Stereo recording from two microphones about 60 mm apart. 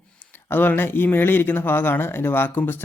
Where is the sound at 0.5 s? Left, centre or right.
Left.